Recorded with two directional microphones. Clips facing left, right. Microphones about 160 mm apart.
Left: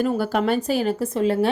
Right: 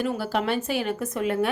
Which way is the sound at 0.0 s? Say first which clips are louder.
Left 5 dB; 50° left (ahead or behind).